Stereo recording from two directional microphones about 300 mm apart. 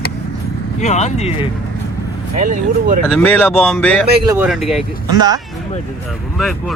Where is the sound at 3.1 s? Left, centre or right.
Centre.